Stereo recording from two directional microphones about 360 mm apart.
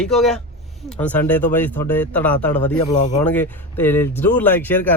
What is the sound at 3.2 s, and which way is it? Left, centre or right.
Speech, centre.